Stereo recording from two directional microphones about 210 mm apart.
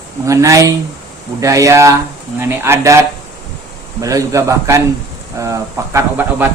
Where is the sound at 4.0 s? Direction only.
15° right (ahead or behind).